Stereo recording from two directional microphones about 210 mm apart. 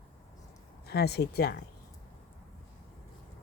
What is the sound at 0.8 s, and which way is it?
Speech, 50° left (ahead or behind).